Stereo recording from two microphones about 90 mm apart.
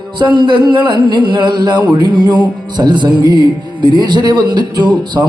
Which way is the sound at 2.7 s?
55° right (ahead or behind).